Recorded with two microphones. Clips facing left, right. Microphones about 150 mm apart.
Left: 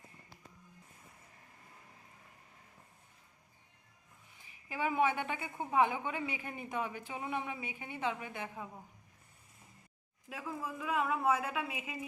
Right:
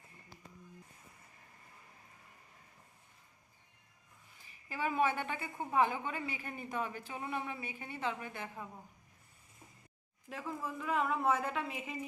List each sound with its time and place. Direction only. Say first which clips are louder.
4.4 s a woman's voice: left 1 dB; 15° left (ahead or behind)
10.2 s a woman's voice: even; 5° left (ahead or behind)